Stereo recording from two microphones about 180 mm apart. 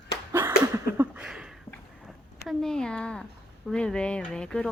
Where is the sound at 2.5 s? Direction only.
Centre (ahead or behind).